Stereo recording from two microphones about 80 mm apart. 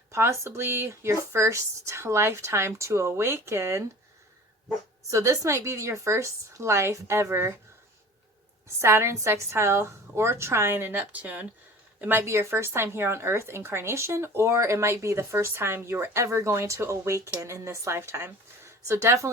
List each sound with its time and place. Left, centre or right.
0.1 s a woman's voice: right
5.1 s a woman's voice: right
8.6 s a woman's voice: right
12.2 s a woman's voice: right